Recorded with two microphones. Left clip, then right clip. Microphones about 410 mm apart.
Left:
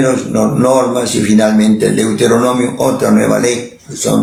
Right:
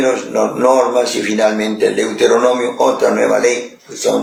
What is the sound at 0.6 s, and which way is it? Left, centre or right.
Speech, left.